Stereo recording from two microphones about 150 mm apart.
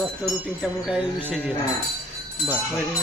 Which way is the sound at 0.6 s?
5° right (ahead or behind).